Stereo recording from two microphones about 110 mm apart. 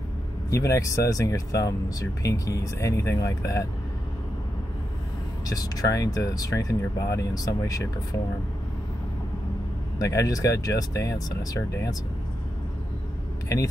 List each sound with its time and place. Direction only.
0.5 s speech: 30° left (ahead or behind)
5.5 s speech: 35° left (ahead or behind)
9.9 s speech: 30° left (ahead or behind)